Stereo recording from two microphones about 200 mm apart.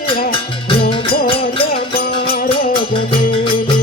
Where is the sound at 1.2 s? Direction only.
30° left (ahead or behind).